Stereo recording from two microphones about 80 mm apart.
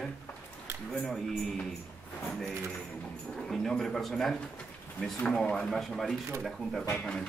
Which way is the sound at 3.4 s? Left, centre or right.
Centre.